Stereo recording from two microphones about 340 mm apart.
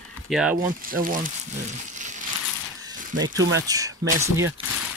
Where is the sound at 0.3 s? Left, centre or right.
Centre.